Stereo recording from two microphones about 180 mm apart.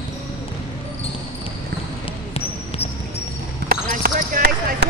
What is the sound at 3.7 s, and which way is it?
Basketball bounce, 55° right (ahead or behind).